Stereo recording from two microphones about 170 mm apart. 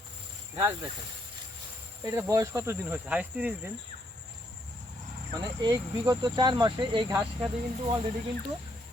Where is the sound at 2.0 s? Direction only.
20° right (ahead or behind).